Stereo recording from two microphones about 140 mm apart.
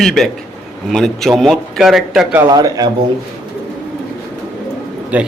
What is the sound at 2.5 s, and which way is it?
Speech, 25° right (ahead or behind).